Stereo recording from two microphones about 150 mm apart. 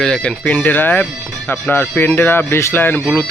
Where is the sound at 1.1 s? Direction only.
Centre (ahead or behind).